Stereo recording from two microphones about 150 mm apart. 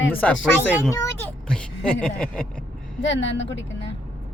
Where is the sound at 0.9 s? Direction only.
20° left (ahead or behind).